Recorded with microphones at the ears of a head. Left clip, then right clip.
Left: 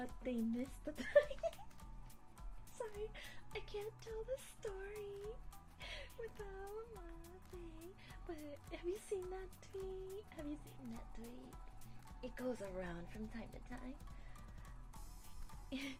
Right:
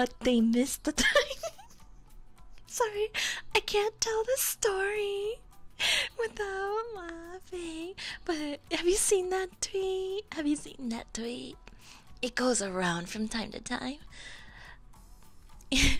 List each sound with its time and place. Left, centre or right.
0.0 s speech: right
2.6 s speech: right